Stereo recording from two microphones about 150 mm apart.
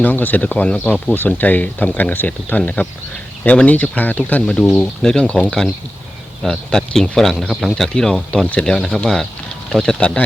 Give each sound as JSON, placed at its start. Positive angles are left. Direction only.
{"t": 0.0, "sound": "speech", "side_deg": 10}